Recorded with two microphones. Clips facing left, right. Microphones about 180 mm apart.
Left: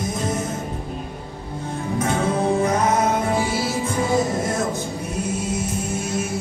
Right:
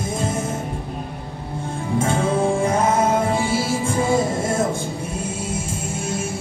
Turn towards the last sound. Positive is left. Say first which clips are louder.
# left 1 dB
turn(degrees=-25)  # may be behind; listen again after turning